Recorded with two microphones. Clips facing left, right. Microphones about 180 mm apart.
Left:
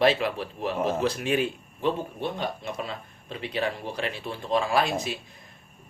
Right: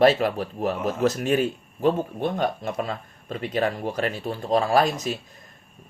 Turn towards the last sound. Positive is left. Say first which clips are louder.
# right 4 dB
turn(degrees=-40)  # may be behind; listen again after turning